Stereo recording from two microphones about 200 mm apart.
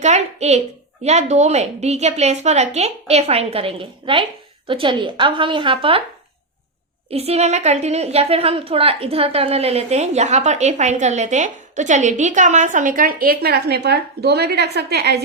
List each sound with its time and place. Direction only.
0.0 s a woman's voice: 35° right (ahead or behind)
7.1 s a woman's voice: 30° right (ahead or behind); by 15.2 s 55° right (ahead or behind)